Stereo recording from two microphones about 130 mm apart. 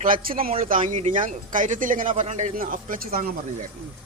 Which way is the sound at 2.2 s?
65° right (ahead or behind).